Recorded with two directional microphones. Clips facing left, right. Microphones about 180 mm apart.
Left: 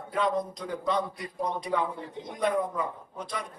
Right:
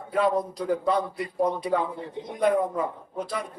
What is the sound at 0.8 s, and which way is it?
Speech, 30° right (ahead or behind).